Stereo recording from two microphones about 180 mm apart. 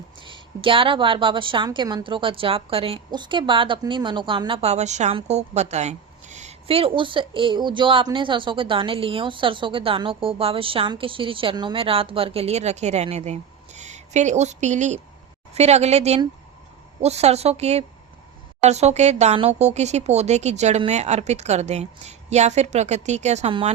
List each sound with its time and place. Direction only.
0.3 s a woman's voice: 30° right (ahead or behind)